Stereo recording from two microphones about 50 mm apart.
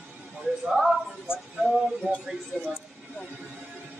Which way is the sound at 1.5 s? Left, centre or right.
Centre.